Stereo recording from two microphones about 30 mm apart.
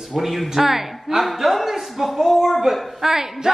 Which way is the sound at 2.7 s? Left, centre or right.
Centre.